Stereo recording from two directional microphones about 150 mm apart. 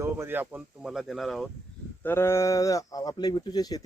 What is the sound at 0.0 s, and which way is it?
Speech, 15° right (ahead or behind).